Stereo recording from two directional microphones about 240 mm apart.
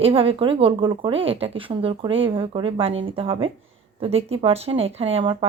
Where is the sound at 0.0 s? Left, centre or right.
Right.